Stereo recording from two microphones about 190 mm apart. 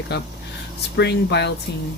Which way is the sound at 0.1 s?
60° left (ahead or behind).